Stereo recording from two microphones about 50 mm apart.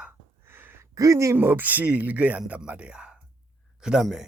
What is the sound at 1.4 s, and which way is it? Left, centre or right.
Speech, right.